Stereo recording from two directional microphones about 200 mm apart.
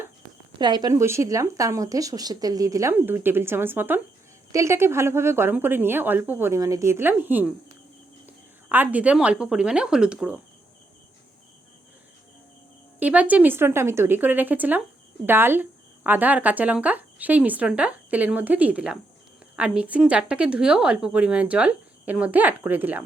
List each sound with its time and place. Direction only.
0.6 s a woman's voice: 20° right (ahead or behind)
8.7 s speech: 10° right (ahead or behind)
13.0 s a woman's voice: 10° right (ahead or behind)